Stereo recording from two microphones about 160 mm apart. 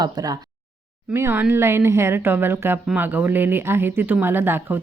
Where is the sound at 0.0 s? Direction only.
25° right (ahead or behind).